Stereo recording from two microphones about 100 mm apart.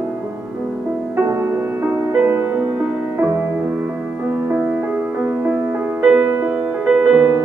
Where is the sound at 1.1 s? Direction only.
25° right (ahead or behind).